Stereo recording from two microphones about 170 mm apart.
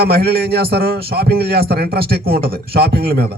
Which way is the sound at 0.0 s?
65° right (ahead or behind).